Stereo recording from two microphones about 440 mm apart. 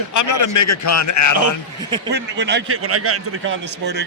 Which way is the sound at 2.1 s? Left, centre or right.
Right.